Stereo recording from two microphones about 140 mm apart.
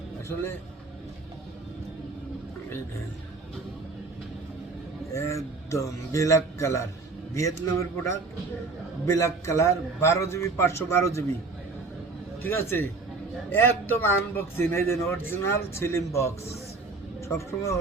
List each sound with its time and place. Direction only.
5.1 s a man's voice: 20° left (ahead or behind)
12.4 s a man's voice: 15° left (ahead or behind)